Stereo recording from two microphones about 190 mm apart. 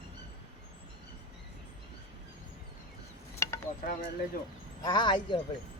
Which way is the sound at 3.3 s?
15° left (ahead or behind).